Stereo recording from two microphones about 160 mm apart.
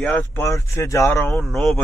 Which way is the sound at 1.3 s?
Centre (ahead or behind).